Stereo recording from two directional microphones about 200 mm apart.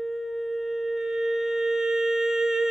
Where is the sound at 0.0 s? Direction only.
Centre (ahead or behind).